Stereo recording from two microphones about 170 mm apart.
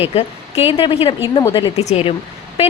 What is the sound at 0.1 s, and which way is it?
A woman's voice, 35° left (ahead or behind).